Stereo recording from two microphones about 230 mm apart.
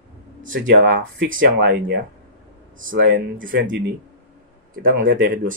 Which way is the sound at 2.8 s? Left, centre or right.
Right.